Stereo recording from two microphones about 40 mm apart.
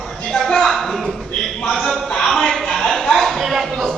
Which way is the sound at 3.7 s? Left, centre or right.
Centre.